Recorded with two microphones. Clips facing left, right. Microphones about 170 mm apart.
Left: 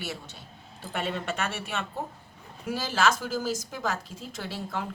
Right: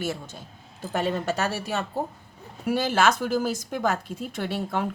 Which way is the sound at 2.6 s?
60° right (ahead or behind).